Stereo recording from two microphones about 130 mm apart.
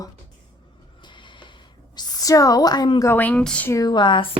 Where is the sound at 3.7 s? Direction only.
30° left (ahead or behind).